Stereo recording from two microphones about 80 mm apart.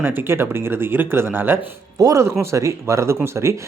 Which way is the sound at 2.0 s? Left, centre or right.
Right.